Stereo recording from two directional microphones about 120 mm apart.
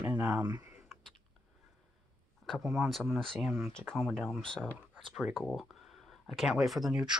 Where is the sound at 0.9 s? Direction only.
Centre (ahead or behind).